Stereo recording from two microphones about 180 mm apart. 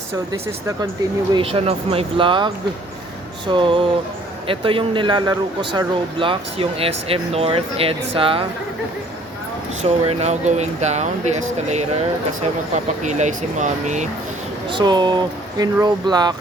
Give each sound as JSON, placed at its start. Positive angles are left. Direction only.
{"t": 0.1, "sound": "speech", "side_deg": -15}
{"t": 1.3, "sound": "speech", "side_deg": -30}
{"t": 9.8, "sound": "speech", "side_deg": -35}
{"t": 14.7, "sound": "speech", "side_deg": -25}